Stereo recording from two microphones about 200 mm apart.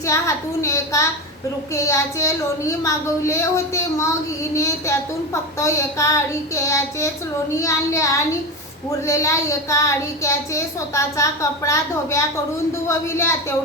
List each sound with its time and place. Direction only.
0.0 s speech: 15° left (ahead or behind)